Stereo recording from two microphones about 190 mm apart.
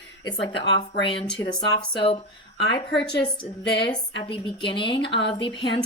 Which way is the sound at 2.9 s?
60° left (ahead or behind).